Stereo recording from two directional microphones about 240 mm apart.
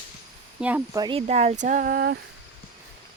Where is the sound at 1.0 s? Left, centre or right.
Right.